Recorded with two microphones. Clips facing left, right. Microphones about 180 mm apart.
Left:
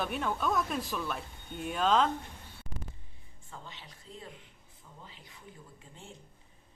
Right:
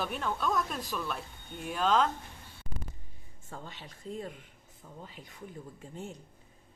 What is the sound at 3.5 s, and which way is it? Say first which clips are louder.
Speech: right 4 dB; 50° right (ahead or behind).